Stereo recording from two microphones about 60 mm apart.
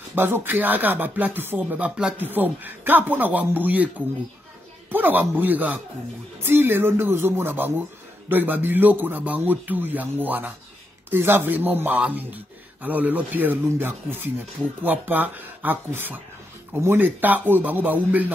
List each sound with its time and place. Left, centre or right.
0.1 s speech: right
4.9 s speech: right